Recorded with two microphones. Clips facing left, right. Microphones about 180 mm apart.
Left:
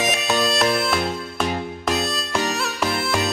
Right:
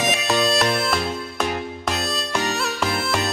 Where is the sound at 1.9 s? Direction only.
Centre (ahead or behind).